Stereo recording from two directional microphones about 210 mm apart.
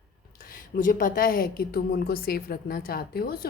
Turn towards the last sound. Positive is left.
turn(degrees=45)  # may be behind; listen again after turning